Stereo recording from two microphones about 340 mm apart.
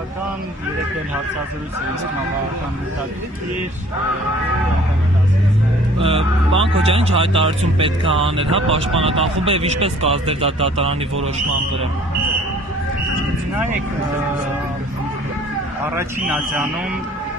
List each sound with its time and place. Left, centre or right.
5.9 s music: centre
6.8 s speech: centre
15.9 s a man's voice: centre